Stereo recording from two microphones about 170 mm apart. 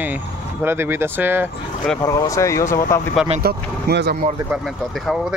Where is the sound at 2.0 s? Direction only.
20° left (ahead or behind).